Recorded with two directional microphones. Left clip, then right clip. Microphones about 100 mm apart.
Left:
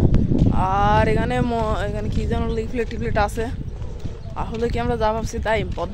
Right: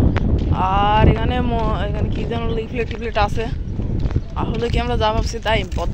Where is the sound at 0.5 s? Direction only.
35° left (ahead or behind).